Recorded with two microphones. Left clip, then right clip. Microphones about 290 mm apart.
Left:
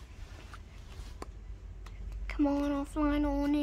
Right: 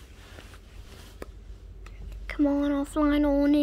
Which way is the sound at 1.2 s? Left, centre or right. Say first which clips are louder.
Right 3 dB; centre.